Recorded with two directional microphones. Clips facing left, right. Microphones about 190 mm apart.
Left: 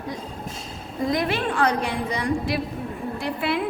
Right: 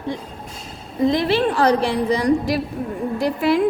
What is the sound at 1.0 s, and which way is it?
A woman's voice, 30° right (ahead or behind).